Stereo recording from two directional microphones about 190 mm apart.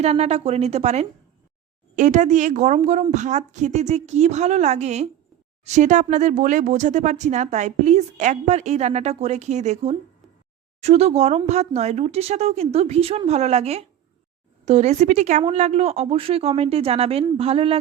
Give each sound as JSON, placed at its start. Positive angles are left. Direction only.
{"t": 0.0, "sound": "speech", "side_deg": -35}